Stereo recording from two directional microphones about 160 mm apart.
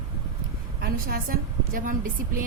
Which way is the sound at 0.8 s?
65° right (ahead or behind).